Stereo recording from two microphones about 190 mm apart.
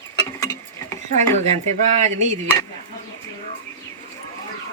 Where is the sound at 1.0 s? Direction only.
40° right (ahead or behind).